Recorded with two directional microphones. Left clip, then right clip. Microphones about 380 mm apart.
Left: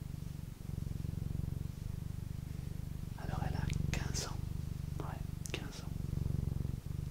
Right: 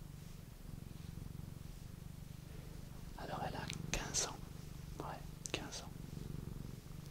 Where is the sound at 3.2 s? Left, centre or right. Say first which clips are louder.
Right 1 dB; centre.